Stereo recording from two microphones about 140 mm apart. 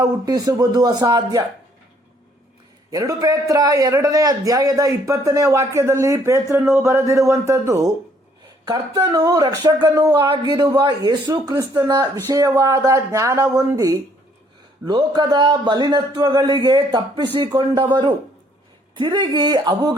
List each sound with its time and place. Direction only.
0.0 s a man's voice: 25° right (ahead or behind)
2.9 s a man's voice: 25° right (ahead or behind)